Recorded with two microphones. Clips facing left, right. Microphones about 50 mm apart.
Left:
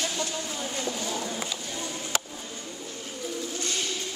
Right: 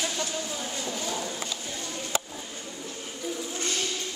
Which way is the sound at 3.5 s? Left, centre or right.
Right.